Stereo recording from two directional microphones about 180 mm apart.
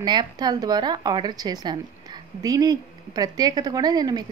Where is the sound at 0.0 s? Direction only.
25° right (ahead or behind).